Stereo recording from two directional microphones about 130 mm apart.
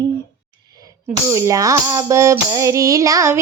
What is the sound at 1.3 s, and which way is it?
Music, 25° right (ahead or behind).